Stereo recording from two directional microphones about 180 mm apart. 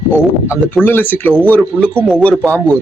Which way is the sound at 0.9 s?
10° left (ahead or behind).